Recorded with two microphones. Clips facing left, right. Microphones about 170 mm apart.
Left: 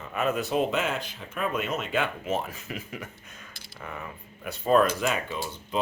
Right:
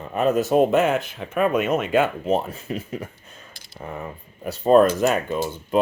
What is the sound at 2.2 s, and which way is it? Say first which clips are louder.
Speech: right 7 dB; 35° right (ahead or behind).